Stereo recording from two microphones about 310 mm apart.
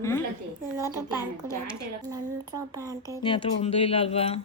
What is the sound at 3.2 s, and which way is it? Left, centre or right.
A child's voice, centre.